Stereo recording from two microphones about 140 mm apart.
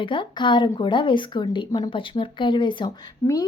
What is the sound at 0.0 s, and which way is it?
Speech, 35° left (ahead or behind).